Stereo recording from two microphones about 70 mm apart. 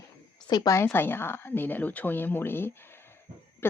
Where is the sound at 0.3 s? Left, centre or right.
Left.